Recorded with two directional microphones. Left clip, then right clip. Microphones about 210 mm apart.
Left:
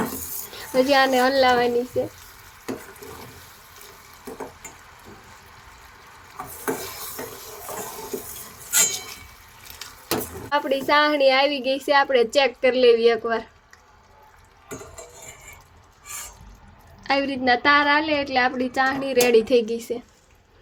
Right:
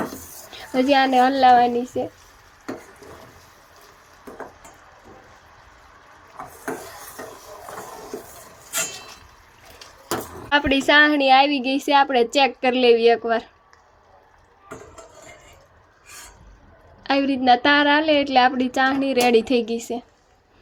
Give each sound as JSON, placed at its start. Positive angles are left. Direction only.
{"t": 0.7, "sound": "a woman's voice", "side_deg": -10}
{"t": 10.5, "sound": "a woman's voice", "side_deg": -15}
{"t": 17.0, "sound": "a woman's voice", "side_deg": -10}